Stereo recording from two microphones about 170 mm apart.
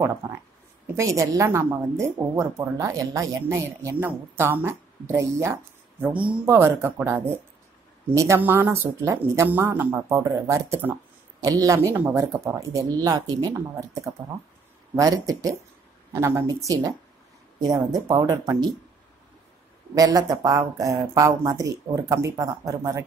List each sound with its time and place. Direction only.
0.0 s a woman's voice: 15° right (ahead or behind)
19.9 s speech: 20° right (ahead or behind)